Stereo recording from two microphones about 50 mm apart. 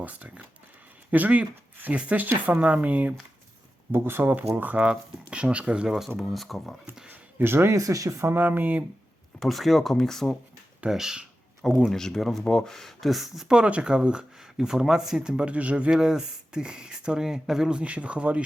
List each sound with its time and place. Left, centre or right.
0.0 s a woman's voice: right
3.9 s speech: right
6.2 s speech: centre
7.3 s speech: right
7.7 s speech: right
8.4 s a woman's voice: right
9.4 s speech: centre
10.8 s speech: centre
11.6 s speech: centre
13.5 s speech: right